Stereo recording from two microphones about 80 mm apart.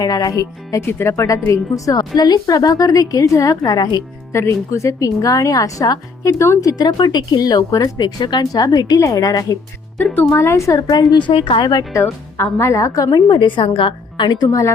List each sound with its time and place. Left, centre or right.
0.0 s a woman's voice: left
0.8 s a woman's voice: left
3.7 s a woman's voice: left
4.3 s a woman's voice: left
10.3 s a woman's voice: left
10.8 s a woman's voice: left
11.1 s speech: left
12.4 s a woman's voice: left
13.1 s a woman's voice: left
14.4 s a woman's voice: left